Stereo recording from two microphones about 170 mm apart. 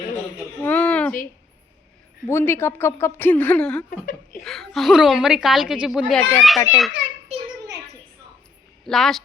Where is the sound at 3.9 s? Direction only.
55° left (ahead or behind).